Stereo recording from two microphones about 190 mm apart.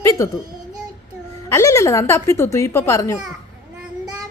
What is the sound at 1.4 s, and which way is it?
A woman's voice, 15° left (ahead or behind).